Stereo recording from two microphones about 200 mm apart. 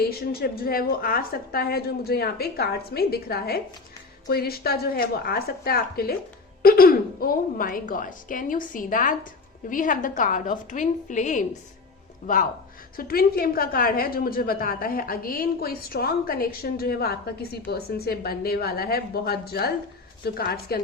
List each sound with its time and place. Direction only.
0.0 s a woman's voice: 50° left (ahead or behind)
13.0 s a woman's voice: 50° left (ahead or behind)